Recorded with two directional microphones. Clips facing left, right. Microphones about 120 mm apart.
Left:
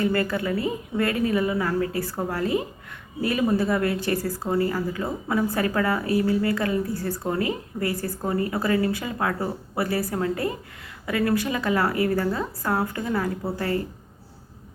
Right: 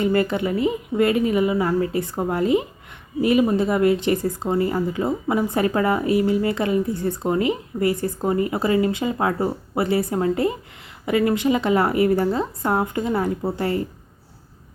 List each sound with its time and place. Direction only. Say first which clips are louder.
0.0 s speech: right 4 dB; 20° right (ahead or behind)